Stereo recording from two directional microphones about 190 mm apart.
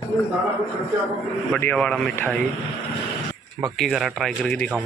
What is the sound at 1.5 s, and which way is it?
Speech, 5° left (ahead or behind).